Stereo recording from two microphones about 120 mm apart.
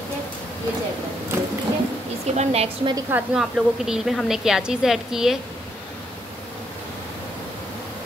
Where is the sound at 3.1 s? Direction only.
5° right (ahead or behind).